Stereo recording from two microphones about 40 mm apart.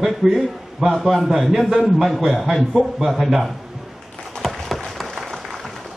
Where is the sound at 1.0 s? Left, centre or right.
Centre.